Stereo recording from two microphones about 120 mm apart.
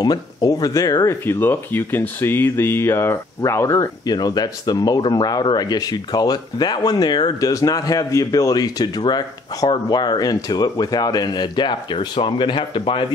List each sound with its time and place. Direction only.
0.0 s speech: 30° left (ahead or behind)
1.2 s speech: 20° left (ahead or behind); by 13.0 s 45° left (ahead or behind)